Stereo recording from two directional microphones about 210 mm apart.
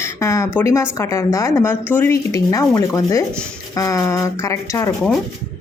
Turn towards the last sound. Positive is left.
turn(degrees=15)  # may be behind; listen again after turning